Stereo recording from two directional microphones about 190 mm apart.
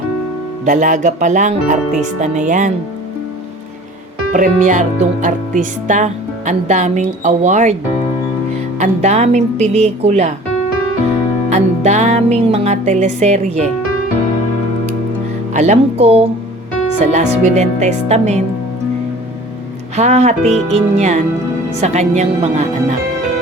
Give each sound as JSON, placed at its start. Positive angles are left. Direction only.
{"t": 0.6, "sound": "speech", "side_deg": -40}
{"t": 4.3, "sound": "speech", "side_deg": -40}
{"t": 8.8, "sound": "speech", "side_deg": -35}
{"t": 11.4, "sound": "speech", "side_deg": -35}
{"t": 15.5, "sound": "speech", "side_deg": -40}
{"t": 20.0, "sound": "speech", "side_deg": -35}